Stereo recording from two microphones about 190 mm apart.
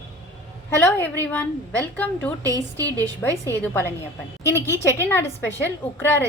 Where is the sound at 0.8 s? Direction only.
10° left (ahead or behind).